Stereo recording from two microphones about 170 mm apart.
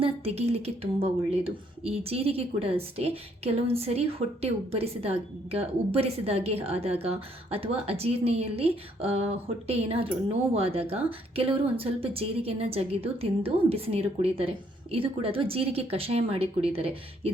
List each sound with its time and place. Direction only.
0.0 s speech: 35° right (ahead or behind)